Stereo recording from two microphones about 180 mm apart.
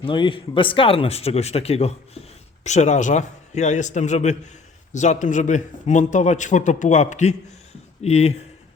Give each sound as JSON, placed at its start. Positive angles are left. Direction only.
{"t": 0.0, "sound": "a man's voice", "side_deg": 30}